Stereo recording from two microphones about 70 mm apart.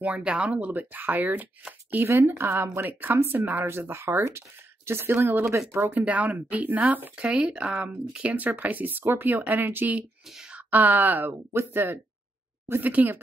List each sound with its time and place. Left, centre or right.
0.0 s speech: centre; by 5.9 s right
5.9 s speech: right
10.3 s a sound: centre
10.7 s speech: right